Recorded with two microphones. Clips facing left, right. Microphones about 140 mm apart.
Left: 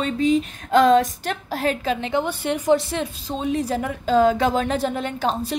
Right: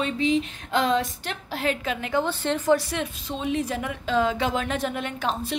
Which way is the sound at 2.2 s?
15° left (ahead or behind).